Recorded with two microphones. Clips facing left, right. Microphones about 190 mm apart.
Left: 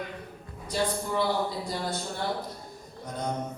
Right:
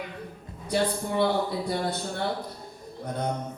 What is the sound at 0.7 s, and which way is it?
Speech, 60° right (ahead or behind).